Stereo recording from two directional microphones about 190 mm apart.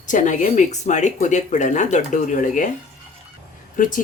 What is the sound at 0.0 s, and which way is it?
Speech, 40° left (ahead or behind).